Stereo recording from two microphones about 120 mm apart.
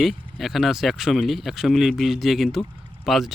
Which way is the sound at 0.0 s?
Centre (ahead or behind).